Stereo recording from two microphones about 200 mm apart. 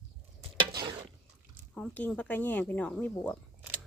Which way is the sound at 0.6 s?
25° right (ahead or behind).